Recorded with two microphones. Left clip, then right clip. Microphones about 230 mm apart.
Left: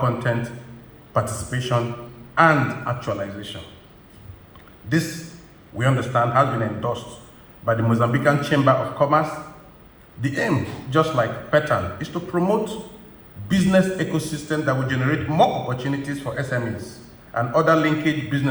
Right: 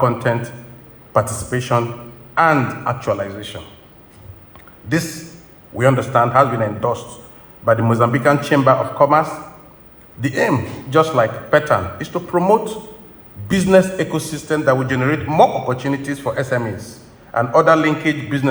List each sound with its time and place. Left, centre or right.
0.0 s a man's voice: right
4.9 s a man's voice: right